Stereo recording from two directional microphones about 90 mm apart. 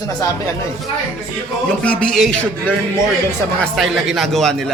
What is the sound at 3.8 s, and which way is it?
Speech, centre (ahead or behind).